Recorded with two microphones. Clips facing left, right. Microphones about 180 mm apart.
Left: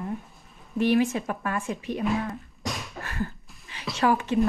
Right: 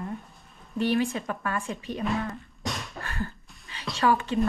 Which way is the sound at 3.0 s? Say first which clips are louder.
Left 2 dB; 20° left (ahead or behind).